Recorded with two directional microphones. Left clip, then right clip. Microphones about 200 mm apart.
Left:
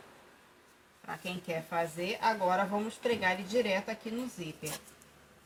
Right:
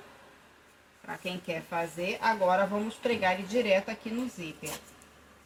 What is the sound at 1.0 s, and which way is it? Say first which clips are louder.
Speech: right 2 dB; 25° left (ahead or behind).